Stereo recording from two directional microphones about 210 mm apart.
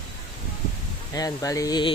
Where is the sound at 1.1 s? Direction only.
15° left (ahead or behind).